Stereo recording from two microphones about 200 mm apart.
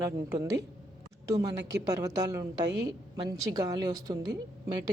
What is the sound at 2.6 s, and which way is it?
Speech, 60° right (ahead or behind).